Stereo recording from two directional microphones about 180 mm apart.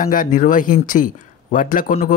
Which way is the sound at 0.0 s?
50° left (ahead or behind).